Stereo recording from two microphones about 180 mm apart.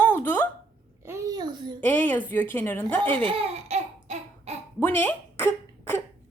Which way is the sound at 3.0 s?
30° right (ahead or behind).